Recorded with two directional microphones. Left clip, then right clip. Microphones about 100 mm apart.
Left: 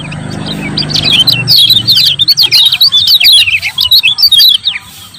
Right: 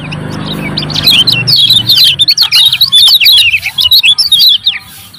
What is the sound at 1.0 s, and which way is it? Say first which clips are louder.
Chirp: right 2 dB; 10° left (ahead or behind).